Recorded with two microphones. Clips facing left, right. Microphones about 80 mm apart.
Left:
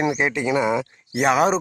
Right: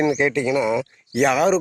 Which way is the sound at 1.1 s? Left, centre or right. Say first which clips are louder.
Right 1 dB; centre.